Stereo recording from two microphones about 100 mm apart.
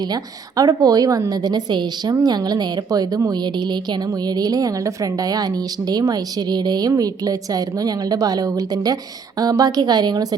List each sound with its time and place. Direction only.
0.1 s a woman's voice: 40° right (ahead or behind)
4.3 s a woman's voice: 40° right (ahead or behind)